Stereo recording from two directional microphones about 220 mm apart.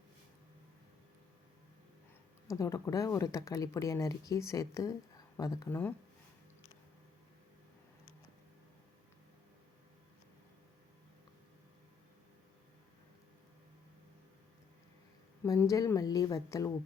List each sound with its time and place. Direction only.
2.5 s speech: 15° left (ahead or behind)
15.4 s speech: 15° left (ahead or behind)